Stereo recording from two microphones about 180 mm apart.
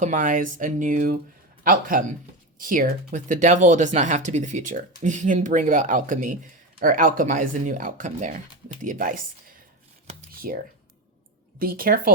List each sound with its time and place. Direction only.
0.0 s speech: 45° right (ahead or behind)
10.3 s computer keyboard: 55° right (ahead or behind)
11.6 s speech: 55° right (ahead or behind)